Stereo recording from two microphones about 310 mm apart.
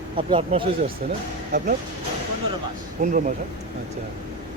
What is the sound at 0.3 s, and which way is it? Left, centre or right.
Speech, centre.